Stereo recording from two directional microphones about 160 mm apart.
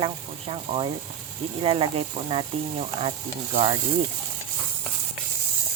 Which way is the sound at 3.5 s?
40° right (ahead or behind).